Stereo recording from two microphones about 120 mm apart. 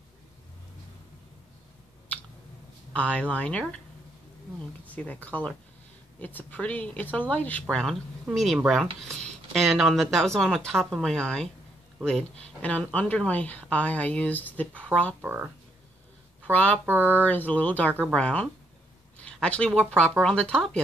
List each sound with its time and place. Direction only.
2.9 s speech: 10° left (ahead or behind)
4.9 s speech: 10° left (ahead or behind)
15.2 s speech: 15° right (ahead or behind)
16.5 s speech: 10° left (ahead or behind)
16.8 s speech: 15° right (ahead or behind)
17.2 s speech: 15° left (ahead or behind)
19.1 s a sound: 10° left (ahead or behind)
20.0 s speech: 10° left (ahead or behind)